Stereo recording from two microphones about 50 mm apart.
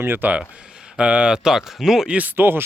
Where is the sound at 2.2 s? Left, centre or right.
Right.